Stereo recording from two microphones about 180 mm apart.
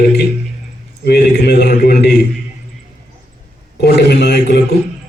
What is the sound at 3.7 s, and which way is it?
Speech, 65° left (ahead or behind).